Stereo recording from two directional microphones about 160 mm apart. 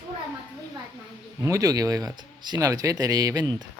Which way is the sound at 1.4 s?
20° right (ahead or behind).